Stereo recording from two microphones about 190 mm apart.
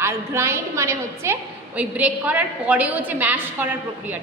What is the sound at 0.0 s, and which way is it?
A woman's voice, 15° right (ahead or behind).